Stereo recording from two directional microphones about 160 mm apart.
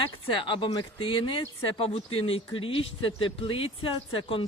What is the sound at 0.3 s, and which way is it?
Speech, 30° left (ahead or behind).